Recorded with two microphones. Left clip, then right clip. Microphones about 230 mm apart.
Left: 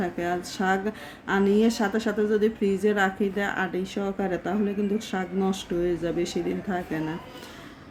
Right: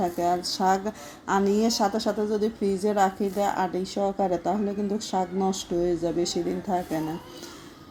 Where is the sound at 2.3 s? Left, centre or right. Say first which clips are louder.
Left 2 dB; centre.